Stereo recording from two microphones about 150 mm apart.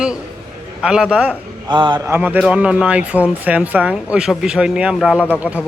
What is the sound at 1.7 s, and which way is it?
Speech, 30° right (ahead or behind).